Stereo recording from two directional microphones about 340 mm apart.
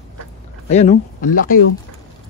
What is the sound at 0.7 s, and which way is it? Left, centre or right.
Speech, centre.